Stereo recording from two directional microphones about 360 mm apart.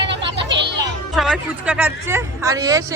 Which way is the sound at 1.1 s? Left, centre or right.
Centre.